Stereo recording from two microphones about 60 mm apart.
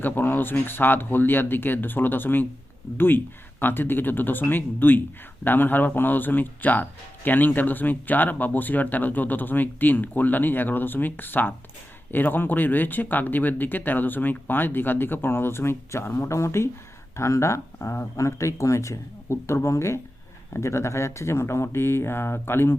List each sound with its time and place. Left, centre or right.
0.0 s speech: left
3.6 s speech: left